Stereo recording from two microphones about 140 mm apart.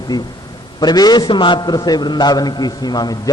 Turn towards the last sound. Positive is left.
turn(degrees=30)  # may be behind; listen again after turning